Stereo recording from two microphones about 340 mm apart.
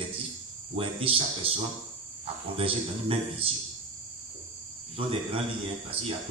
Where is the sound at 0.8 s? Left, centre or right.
Centre.